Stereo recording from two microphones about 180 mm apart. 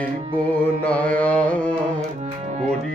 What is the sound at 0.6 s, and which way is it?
Music, 5° left (ahead or behind).